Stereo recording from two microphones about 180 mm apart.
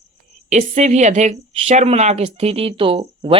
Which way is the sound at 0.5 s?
40° right (ahead or behind).